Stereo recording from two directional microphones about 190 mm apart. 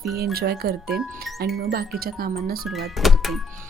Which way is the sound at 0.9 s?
5° right (ahead or behind).